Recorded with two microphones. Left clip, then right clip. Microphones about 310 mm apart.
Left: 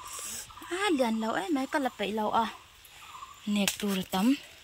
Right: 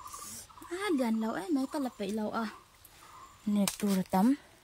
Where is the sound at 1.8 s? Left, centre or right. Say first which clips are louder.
Left 6 dB; centre.